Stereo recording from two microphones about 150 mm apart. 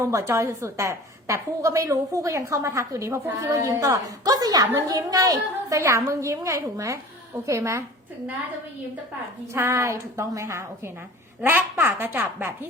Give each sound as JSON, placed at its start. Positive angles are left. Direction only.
{"t": 0.0, "sound": "a woman's voice", "side_deg": -20}
{"t": 9.5, "sound": "a woman's voice", "side_deg": -20}